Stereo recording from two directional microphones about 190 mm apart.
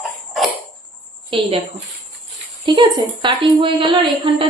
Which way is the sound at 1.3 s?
30° right (ahead or behind).